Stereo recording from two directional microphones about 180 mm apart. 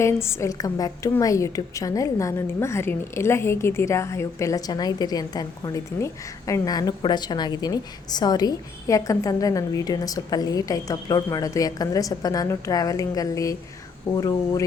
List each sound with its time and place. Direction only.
0.0 s a woman's voice: 15° left (ahead or behind)